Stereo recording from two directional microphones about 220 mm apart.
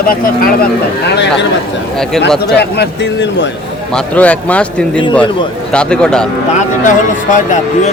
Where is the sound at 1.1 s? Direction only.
50° left (ahead or behind).